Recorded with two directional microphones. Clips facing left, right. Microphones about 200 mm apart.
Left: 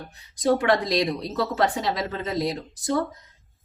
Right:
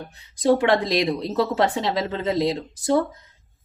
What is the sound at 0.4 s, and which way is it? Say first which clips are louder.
A woman's voice: right 3 dB; 25° right (ahead or behind).